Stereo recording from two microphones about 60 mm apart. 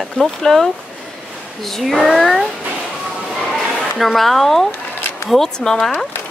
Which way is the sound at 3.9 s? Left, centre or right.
Centre.